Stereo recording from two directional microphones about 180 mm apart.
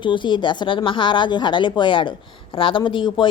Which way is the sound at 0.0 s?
25° left (ahead or behind).